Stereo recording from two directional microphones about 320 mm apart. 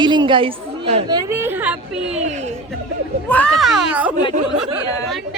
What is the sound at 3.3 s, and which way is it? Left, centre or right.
Speech, centre.